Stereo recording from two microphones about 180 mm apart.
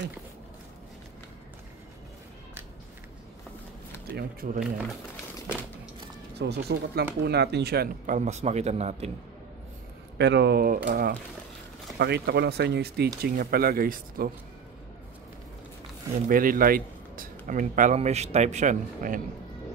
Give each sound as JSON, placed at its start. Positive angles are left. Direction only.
{"t": 4.2, "sound": "speech", "side_deg": -55}
{"t": 6.3, "sound": "speech", "side_deg": -70}
{"t": 8.3, "sound": "speech", "side_deg": -40}
{"t": 10.1, "sound": "speech", "side_deg": -75}
{"t": 12.0, "sound": "speech", "side_deg": -65}
{"t": 16.3, "sound": "speech", "side_deg": -50}